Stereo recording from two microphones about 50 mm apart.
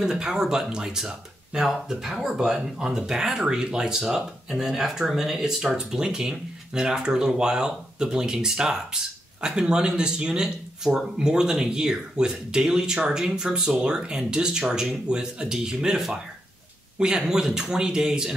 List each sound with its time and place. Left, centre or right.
0.0 s speech: centre